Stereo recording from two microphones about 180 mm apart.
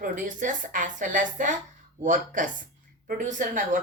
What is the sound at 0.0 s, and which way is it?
Speech, 45° right (ahead or behind).